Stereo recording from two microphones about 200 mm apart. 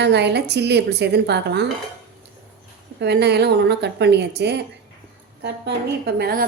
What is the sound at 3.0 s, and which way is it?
Speech, 55° right (ahead or behind).